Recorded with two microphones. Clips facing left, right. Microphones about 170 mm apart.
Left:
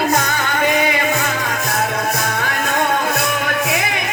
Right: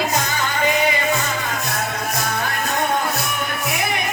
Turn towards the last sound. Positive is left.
turn(degrees=75)  # may be behind; listen again after turning